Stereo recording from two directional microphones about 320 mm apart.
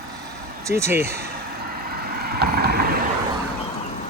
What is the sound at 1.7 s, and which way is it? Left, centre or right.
Vehicle, right.